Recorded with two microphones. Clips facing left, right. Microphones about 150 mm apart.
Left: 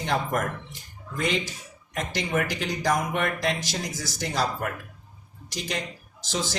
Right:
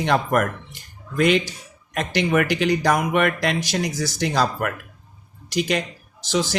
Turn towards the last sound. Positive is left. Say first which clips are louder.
# right 7 dB
turn(degrees=-75)  # may be behind; listen again after turning